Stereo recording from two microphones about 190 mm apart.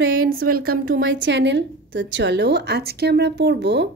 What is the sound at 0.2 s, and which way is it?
Speech, 50° right (ahead or behind).